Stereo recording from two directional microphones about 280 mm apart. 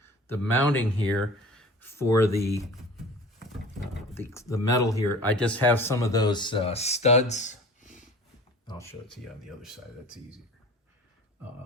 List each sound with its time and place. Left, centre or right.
0.5 s speech: centre
4.1 s speech: centre; by 8.0 s left
8.6 s speech: centre
9.6 s speech: centre